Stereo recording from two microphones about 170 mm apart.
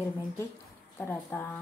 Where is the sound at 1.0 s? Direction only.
15° left (ahead or behind).